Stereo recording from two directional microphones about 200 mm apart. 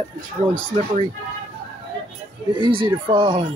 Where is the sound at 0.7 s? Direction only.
30° right (ahead or behind).